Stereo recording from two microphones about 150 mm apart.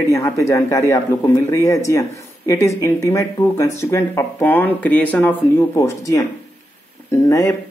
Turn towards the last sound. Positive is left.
turn(degrees=20)  # may be behind; listen again after turning